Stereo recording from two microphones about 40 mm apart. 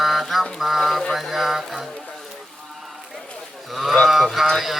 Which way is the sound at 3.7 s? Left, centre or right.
Centre.